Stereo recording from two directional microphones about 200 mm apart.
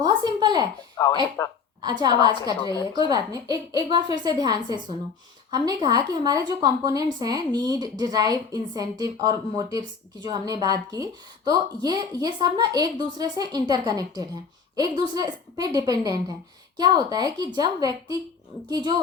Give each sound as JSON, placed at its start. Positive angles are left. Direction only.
{"t": 0.0, "sound": "a sound", "side_deg": -20}
{"t": 1.0, "sound": "speech", "side_deg": 15}
{"t": 1.8, "sound": "speech", "side_deg": -20}